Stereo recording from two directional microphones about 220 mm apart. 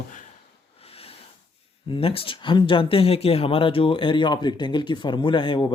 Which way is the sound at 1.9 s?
25° left (ahead or behind).